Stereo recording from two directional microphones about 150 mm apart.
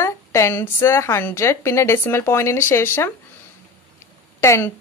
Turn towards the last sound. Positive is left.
turn(degrees=20)  # may be behind; listen again after turning